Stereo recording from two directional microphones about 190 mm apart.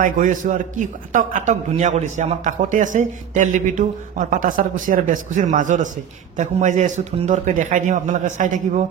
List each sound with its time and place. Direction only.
0.0 s a man's voice: 45° right (ahead or behind)